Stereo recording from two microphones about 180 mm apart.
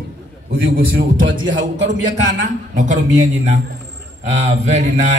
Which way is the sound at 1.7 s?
75° right (ahead or behind).